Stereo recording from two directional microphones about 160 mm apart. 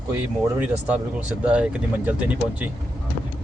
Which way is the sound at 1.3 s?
5° right (ahead or behind).